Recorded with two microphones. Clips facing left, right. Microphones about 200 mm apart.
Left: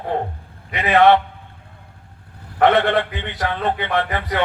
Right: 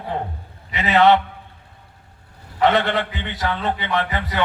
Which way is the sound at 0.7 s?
55° left (ahead or behind).